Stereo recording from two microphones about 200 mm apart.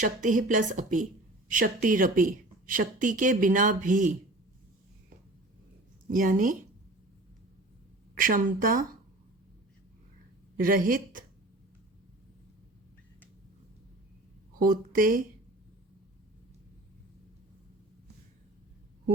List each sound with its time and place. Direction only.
0.0 s speech: 40° right (ahead or behind)
6.1 s a woman's voice: 45° right (ahead or behind)
8.2 s a woman's voice: 40° right (ahead or behind)
10.6 s a woman's voice: 45° right (ahead or behind)
14.6 s speech: 45° right (ahead or behind)